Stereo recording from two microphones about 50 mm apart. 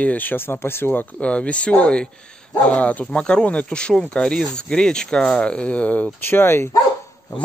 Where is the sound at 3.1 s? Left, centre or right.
Centre.